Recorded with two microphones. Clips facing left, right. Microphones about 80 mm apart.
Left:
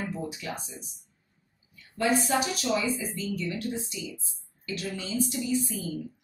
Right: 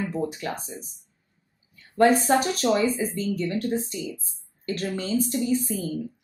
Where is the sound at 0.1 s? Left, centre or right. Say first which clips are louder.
Right 6 dB; right.